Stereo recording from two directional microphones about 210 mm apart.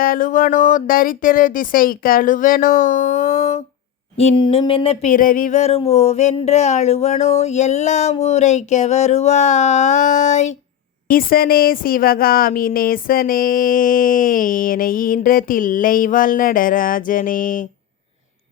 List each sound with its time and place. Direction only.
0.0 s a woman's voice: 40° left (ahead or behind)
4.2 s a sound: 25° left (ahead or behind)
5.1 s a woman's voice: 40° left (ahead or behind)